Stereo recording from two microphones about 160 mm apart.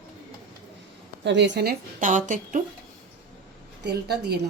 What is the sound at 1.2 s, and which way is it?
A woman's voice, 90° right.